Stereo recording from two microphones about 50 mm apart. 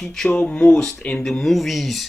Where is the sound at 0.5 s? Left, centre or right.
Left.